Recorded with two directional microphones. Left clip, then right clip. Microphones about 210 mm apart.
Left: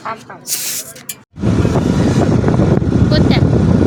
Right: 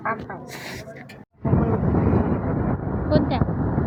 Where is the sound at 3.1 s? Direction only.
15° left (ahead or behind).